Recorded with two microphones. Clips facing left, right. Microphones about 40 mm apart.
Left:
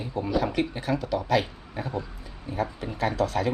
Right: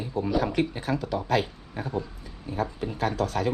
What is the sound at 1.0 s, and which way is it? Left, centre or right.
Speech, left.